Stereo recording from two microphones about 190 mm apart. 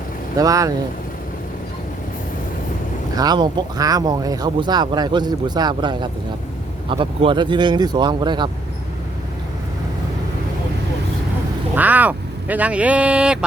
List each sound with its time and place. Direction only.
0.3 s speech: 20° right (ahead or behind)
3.2 s speech: 20° right (ahead or behind)
11.7 s speech: 10° right (ahead or behind)